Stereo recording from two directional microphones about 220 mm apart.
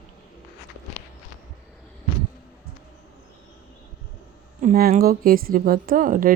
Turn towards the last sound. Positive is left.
turn(degrees=-40)  # may be behind; listen again after turning